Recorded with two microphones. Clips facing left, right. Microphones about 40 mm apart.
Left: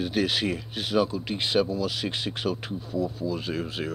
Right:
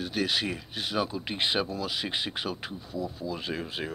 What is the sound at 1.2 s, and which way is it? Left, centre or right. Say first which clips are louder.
Speech: left 4 dB; right.